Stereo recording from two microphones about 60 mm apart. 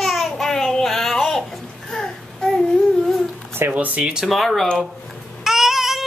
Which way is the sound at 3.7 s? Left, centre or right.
Right.